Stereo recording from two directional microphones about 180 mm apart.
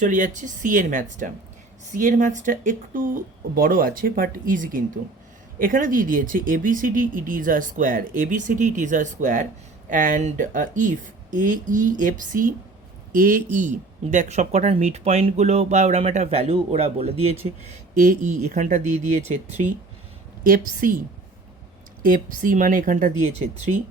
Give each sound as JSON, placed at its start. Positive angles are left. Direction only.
{"t": 0.0, "sound": "speech", "side_deg": -45}
{"t": 17.7, "sound": "speech", "side_deg": -45}
{"t": 20.4, "sound": "speech", "side_deg": -50}
{"t": 22.0, "sound": "speech", "side_deg": -50}